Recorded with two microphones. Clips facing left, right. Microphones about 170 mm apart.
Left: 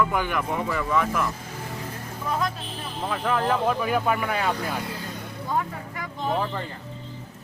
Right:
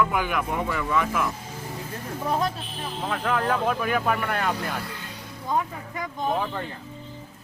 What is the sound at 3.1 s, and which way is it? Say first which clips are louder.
Speech: left 1 dB; centre (ahead or behind).